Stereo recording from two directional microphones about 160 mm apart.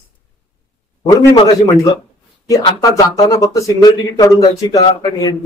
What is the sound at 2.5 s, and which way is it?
A man's voice, 25° left (ahead or behind).